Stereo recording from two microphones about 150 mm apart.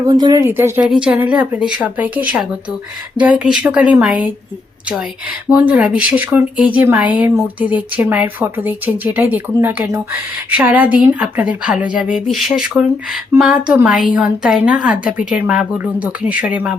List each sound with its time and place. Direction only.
0.0 s speech: 30° right (ahead or behind)
0.4 s a woman's voice: 15° right (ahead or behind)
5.5 s a woman's voice: 10° right (ahead or behind)